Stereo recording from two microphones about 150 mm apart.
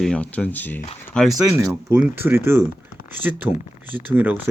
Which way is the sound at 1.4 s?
20° right (ahead or behind).